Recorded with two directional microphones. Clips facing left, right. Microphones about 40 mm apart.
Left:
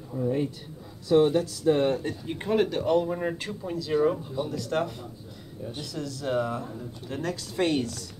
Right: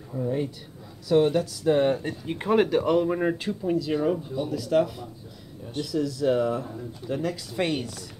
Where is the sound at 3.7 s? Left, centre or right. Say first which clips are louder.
Even; centre.